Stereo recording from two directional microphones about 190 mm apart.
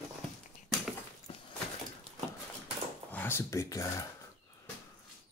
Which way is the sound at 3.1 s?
10° left (ahead or behind).